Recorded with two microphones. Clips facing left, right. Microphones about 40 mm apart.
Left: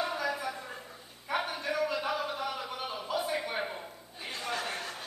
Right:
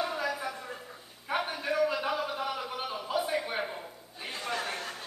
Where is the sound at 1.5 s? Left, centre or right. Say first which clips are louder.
Right 3 dB; centre.